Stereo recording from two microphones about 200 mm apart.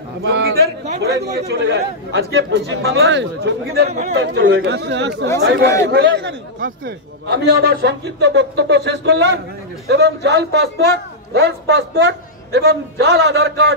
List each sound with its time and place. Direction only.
0.2 s a sound: 60° right (ahead or behind)
1.0 s a man's voice: 55° right (ahead or behind)
4.1 s a man's voice: 70° right (ahead or behind)